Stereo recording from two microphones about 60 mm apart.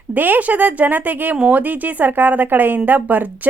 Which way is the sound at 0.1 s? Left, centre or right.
Right.